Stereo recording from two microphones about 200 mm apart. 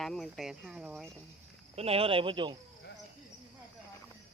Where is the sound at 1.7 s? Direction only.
30° right (ahead or behind).